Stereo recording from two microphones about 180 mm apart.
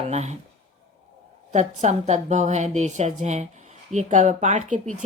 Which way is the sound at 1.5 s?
40° right (ahead or behind).